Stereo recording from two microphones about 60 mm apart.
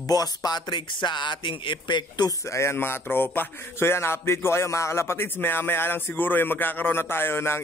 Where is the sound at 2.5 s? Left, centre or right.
Left.